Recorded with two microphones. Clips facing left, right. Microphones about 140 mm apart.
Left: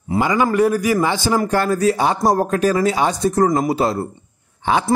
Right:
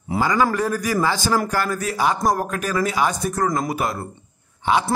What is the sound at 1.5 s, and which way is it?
Speech, 30° left (ahead or behind).